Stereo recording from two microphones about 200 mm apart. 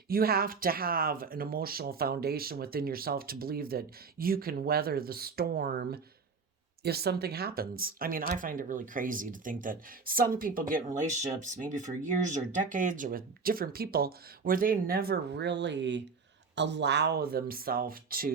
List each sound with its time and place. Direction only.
0.1 s speech: 50° right (ahead or behind)